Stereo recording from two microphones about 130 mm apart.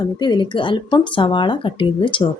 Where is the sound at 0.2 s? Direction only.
35° left (ahead or behind).